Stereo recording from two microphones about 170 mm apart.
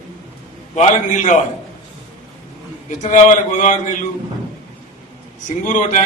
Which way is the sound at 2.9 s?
45° left (ahead or behind).